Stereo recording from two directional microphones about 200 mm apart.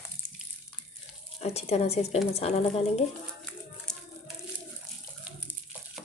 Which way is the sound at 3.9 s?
Centre (ahead or behind).